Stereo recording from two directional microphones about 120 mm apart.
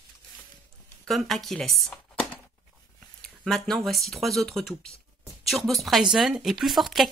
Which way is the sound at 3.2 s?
5° left (ahead or behind).